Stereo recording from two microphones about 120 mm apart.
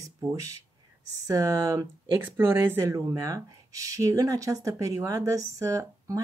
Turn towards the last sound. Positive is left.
turn(degrees=-30)  # may be behind; listen again after turning